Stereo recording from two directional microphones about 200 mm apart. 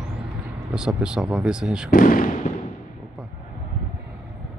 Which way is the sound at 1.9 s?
45° left (ahead or behind).